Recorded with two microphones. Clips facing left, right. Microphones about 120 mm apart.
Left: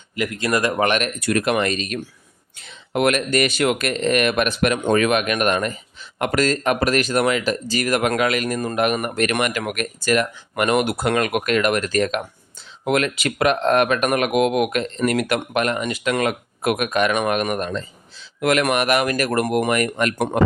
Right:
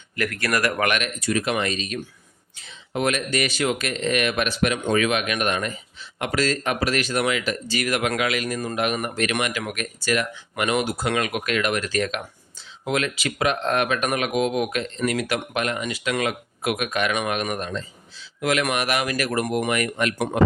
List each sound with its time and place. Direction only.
0.2 s speech: 20° left (ahead or behind)
1.0 s speech: 60° left (ahead or behind)